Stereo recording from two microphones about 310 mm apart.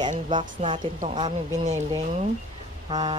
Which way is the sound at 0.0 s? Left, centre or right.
Centre.